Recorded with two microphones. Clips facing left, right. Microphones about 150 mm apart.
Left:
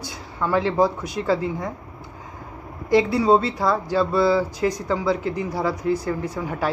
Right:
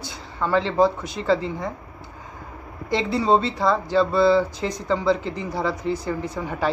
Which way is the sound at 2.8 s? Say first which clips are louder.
Left 4 dB; 10° left (ahead or behind).